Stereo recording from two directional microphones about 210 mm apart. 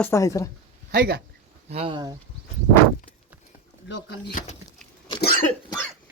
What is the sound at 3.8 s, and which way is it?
Speech, 55° left (ahead or behind).